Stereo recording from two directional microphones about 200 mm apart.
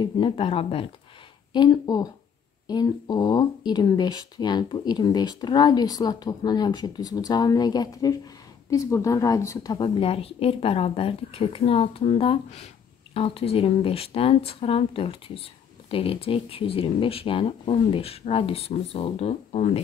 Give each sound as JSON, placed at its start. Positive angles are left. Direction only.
{"t": 0.0, "sound": "speech", "side_deg": 25}